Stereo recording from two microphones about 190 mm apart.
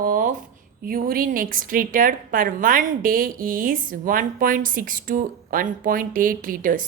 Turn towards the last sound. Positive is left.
turn(degrees=-45)  # may be behind; listen again after turning